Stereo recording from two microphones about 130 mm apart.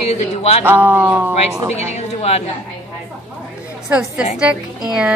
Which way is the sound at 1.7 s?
55° left (ahead or behind).